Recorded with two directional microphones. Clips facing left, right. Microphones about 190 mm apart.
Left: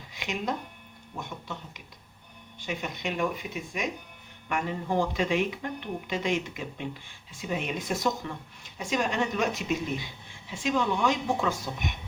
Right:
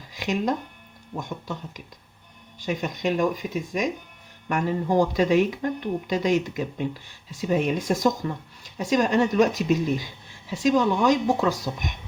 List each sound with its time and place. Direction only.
0.1 s speech: 40° right (ahead or behind)